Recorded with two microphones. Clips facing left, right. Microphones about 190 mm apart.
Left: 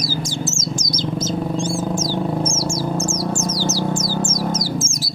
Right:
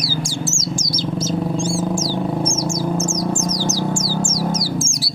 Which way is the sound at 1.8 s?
10° right (ahead or behind).